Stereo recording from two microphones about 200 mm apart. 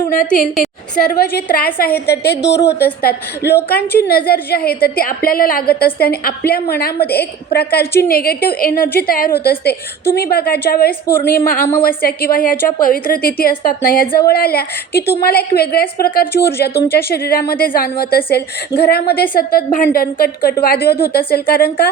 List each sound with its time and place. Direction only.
0.3 s a woman's voice: centre (ahead or behind)
0.9 s a woman's voice: 50° left (ahead or behind)
14.9 s speech: 10° left (ahead or behind)
15.2 s a woman's voice: 50° left (ahead or behind)
16.2 s speech: 10° left (ahead or behind)
16.6 s a woman's voice: 50° left (ahead or behind)